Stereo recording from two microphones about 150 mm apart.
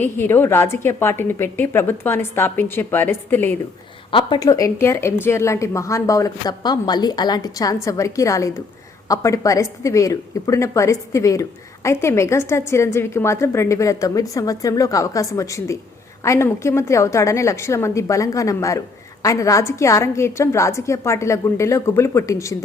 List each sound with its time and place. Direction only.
0.0 s a woman's voice: 15° left (ahead or behind)
4.1 s a woman's voice: 35° left (ahead or behind)
4.4 s a woman's voice: 25° left (ahead or behind)